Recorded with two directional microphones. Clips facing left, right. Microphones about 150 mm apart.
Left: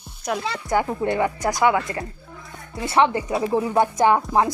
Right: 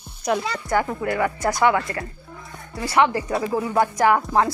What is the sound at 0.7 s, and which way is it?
A woman's voice, 20° left (ahead or behind).